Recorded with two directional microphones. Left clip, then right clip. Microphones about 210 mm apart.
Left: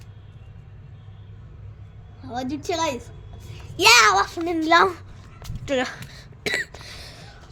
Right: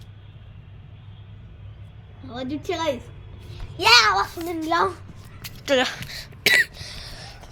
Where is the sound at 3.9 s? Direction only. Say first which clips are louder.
Even; 55° left (ahead or behind).